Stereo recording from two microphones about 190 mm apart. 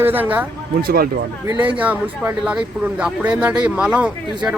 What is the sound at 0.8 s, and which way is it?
Speech, 55° right (ahead or behind).